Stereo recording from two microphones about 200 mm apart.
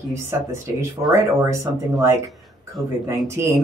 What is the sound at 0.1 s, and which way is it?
Speech, 15° right (ahead or behind).